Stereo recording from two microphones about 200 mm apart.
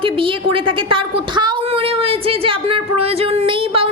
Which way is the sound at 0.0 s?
25° right (ahead or behind).